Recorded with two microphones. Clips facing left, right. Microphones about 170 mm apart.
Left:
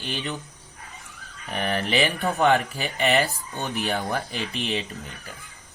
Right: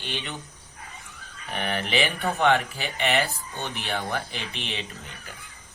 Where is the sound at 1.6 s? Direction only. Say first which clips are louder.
Left 3 dB; 40° left (ahead or behind).